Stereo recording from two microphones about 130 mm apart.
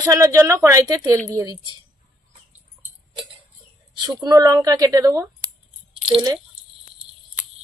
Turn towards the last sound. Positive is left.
turn(degrees=-35)  # may be behind; listen again after turning